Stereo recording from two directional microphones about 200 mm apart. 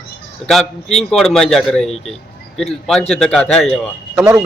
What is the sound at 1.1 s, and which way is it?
Speech, centre (ahead or behind).